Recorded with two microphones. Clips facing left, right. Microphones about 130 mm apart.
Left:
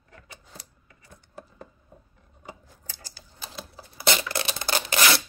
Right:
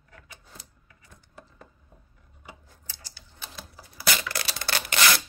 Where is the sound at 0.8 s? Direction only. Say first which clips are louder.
Left 3 dB; 35° left (ahead or behind).